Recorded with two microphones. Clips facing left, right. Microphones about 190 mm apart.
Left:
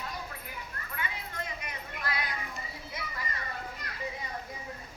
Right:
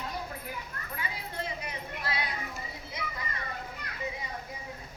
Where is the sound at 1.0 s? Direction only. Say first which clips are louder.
Right 1 dB; 30° right (ahead or behind).